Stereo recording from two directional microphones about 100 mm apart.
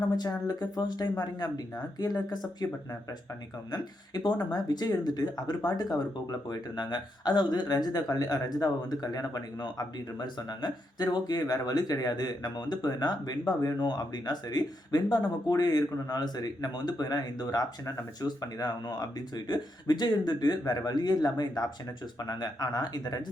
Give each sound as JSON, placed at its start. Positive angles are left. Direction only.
{"t": 0.2, "sound": "speech", "side_deg": 40}
{"t": 3.7, "sound": "speech", "side_deg": 45}